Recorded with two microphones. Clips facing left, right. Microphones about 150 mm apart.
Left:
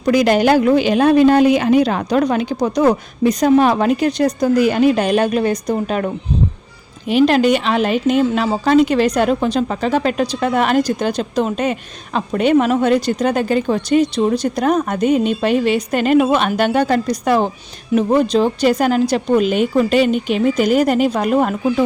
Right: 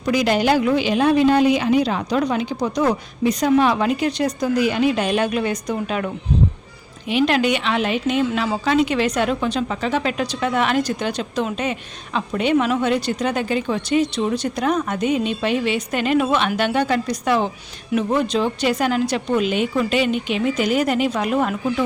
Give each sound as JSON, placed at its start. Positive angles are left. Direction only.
{"t": 0.1, "sound": "a woman's voice", "side_deg": 50}
{"t": 7.1, "sound": "speech", "side_deg": 40}